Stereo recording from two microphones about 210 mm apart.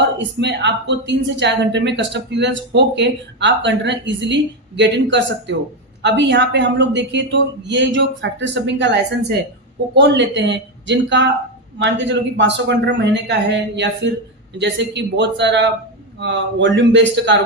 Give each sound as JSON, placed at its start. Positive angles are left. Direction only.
{"t": 0.2, "sound": "speech", "side_deg": -55}